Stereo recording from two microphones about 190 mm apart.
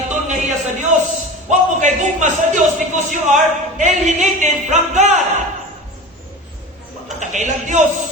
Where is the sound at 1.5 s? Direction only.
40° right (ahead or behind).